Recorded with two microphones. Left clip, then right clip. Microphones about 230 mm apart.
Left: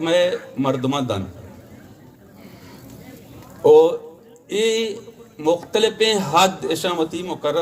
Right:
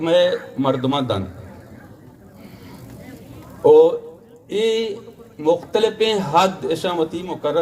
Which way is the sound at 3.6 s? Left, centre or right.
Left.